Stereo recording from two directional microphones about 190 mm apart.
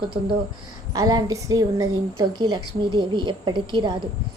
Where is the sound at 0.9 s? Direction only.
20° right (ahead or behind).